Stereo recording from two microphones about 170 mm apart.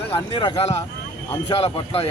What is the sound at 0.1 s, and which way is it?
Speech, 30° left (ahead or behind).